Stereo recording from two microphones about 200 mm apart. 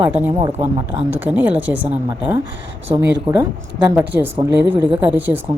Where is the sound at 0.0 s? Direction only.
10° right (ahead or behind).